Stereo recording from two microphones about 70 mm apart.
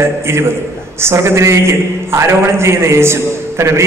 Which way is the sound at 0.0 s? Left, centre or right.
Right.